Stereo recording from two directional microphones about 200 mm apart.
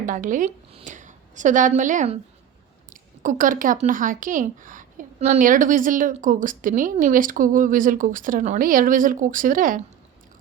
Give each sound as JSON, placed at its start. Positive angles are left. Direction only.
{"t": 0.0, "sound": "a woman's voice", "side_deg": -40}